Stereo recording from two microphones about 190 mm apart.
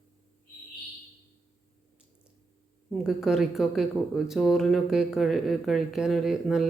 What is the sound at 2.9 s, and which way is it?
Speech, centre (ahead or behind).